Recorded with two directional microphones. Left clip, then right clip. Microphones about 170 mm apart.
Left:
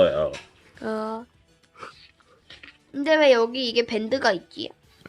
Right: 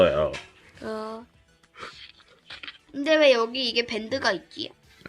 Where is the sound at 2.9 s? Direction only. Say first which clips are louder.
Left 1 dB; 45° left (ahead or behind).